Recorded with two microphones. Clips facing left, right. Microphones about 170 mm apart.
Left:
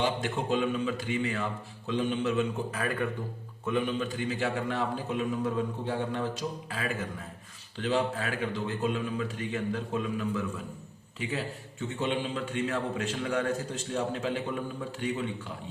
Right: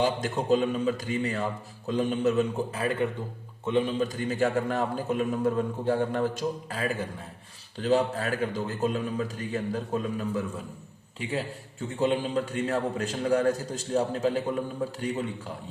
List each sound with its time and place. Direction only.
0.0 s a man's voice: 40° right (ahead or behind)
2.7 s a man's voice: 25° right (ahead or behind)
11.9 s a man's voice: 40° right (ahead or behind)